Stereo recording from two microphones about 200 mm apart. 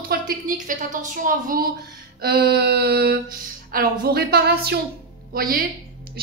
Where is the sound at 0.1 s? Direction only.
45° right (ahead or behind).